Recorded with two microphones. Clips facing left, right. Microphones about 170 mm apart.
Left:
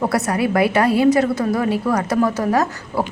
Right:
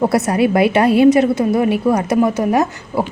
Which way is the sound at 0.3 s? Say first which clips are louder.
Right 4 dB; 25° right (ahead or behind).